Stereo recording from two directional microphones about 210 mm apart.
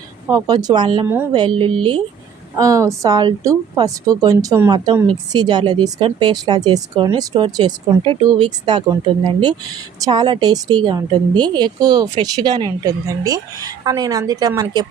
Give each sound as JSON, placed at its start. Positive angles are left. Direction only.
{"t": 0.3, "sound": "a woman's voice", "side_deg": -15}
{"t": 1.0, "sound": "speech", "side_deg": -10}
{"t": 1.3, "sound": "a woman's voice", "side_deg": -20}
{"t": 10.0, "sound": "a woman's voice", "side_deg": -20}